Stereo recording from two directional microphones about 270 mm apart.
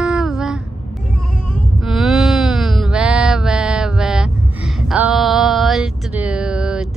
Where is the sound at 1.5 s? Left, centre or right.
Centre.